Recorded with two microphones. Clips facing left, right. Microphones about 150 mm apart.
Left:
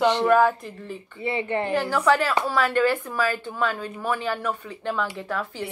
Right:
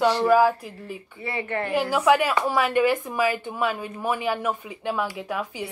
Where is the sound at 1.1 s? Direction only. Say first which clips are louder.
Left 3 dB; 20° left (ahead or behind).